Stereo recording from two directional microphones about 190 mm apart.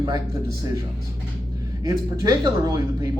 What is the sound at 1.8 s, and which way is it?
Speech, 20° right (ahead or behind).